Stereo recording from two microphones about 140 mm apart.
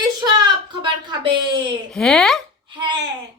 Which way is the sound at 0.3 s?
30° right (ahead or behind).